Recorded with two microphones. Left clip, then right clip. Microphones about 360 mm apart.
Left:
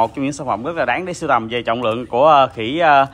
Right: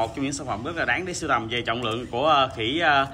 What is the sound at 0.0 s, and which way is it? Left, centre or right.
A man's voice, centre.